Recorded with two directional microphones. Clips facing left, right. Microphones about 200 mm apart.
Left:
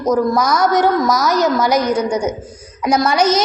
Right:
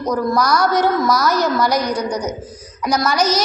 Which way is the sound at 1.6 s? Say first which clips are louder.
Left 2 dB; 45° left (ahead or behind).